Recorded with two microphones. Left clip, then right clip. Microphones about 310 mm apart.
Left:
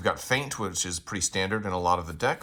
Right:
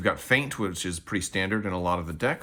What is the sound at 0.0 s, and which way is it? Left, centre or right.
Speech, centre.